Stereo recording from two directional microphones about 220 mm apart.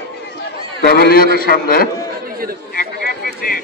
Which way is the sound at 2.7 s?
40° left (ahead or behind).